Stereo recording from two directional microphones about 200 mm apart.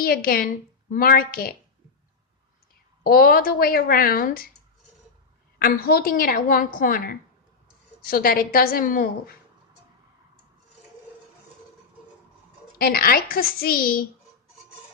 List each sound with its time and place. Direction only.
0.0 s a woman's voice: 45° left (ahead or behind)
3.0 s a woman's voice: 50° left (ahead or behind)
5.5 s a woman's voice: 45° left (ahead or behind)
12.8 s a woman's voice: 50° left (ahead or behind)